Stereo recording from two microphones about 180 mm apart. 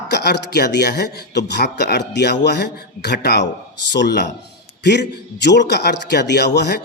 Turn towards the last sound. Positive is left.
turn(degrees=65)  # may be behind; listen again after turning